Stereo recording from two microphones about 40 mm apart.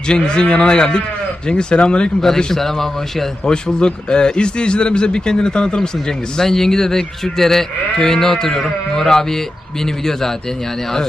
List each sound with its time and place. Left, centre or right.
0.1 s a man's voice: centre
2.2 s speech: centre
3.4 s a man's voice: centre